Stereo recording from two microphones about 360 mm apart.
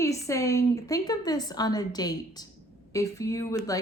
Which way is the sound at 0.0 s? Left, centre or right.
Centre.